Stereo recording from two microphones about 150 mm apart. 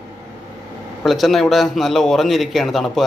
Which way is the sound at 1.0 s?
Centre (ahead or behind).